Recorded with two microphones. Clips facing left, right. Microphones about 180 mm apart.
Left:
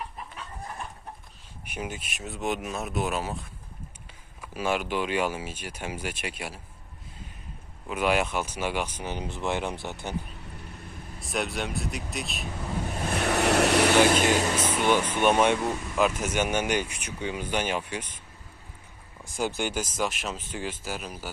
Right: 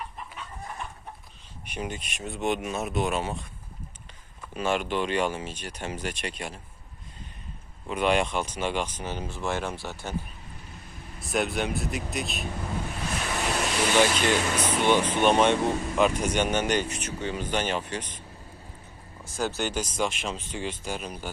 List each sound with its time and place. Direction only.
1.6 s speech: 5° left (ahead or behind)
7.9 s speech: 5° left (ahead or behind)
11.2 s speech: centre (ahead or behind)
13.1 s vehicle: 65° left (ahead or behind)
14.1 s speech: 45° left (ahead or behind)
14.6 s speech: 5° left (ahead or behind)
19.2 s speech: 15° left (ahead or behind)